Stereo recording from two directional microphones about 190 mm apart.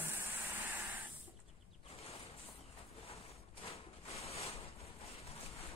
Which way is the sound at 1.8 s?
30° left (ahead or behind).